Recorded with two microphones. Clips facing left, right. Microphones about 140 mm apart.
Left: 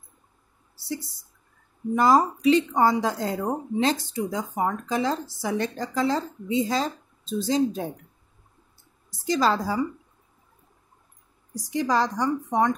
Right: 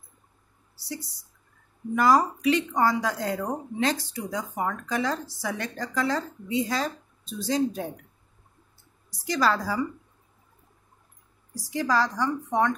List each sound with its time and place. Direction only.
2.0 s speech: 25° left (ahead or behind)
9.2 s speech: 25° left (ahead or behind)
11.5 s speech: 20° left (ahead or behind)